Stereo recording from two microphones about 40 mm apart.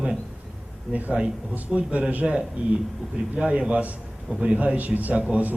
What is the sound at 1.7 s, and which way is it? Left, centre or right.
Speech, centre.